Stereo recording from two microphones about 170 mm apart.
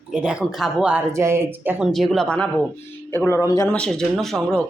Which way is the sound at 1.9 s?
Centre (ahead or behind).